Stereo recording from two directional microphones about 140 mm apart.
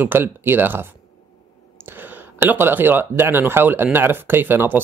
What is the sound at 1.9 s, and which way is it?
Speech, 15° right (ahead or behind).